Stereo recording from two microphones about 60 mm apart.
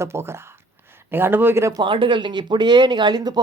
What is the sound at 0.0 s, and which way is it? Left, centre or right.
Speech, right.